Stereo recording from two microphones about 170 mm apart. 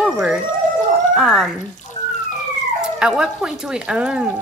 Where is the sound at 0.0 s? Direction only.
5° right (ahead or behind).